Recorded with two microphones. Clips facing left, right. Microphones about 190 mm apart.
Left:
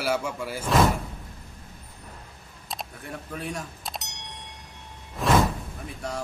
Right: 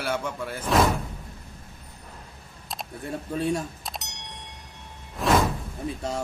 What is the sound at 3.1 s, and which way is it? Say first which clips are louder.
Speech: right 8 dB; 25° right (ahead or behind).